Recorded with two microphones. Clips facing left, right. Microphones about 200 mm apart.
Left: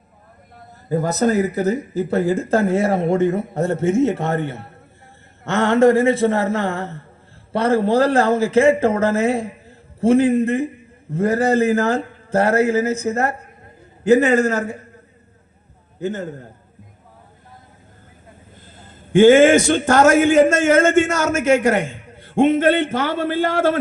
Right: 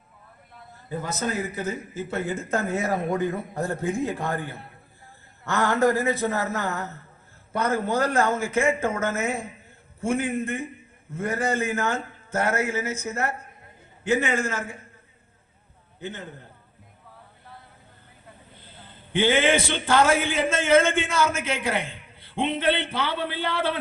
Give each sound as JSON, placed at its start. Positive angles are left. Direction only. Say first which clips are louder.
{"t": 0.9, "sound": "speech", "louder": "left 11 dB", "side_deg": 40}
{"t": 5.6, "sound": "speech", "louder": "left 9 dB", "side_deg": 25}
{"t": 16.0, "sound": "speech", "louder": "left 11 dB", "side_deg": 40}
{"t": 18.5, "sound": "a man's voice", "louder": "left 4 dB", "side_deg": 45}